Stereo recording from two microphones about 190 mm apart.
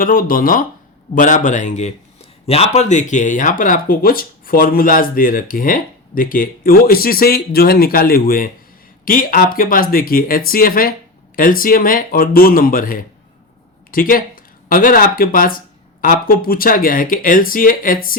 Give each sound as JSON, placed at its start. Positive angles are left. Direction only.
{"t": 0.0, "sound": "speech", "side_deg": 50}